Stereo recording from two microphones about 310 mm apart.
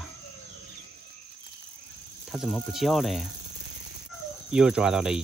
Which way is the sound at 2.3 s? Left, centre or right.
Centre.